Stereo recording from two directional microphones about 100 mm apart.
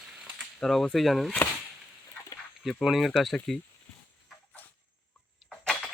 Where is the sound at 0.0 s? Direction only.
5° right (ahead or behind).